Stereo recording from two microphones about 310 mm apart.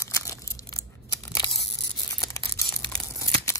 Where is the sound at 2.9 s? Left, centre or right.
Centre.